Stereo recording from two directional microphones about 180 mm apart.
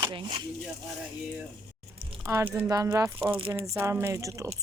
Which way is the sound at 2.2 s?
15° right (ahead or behind).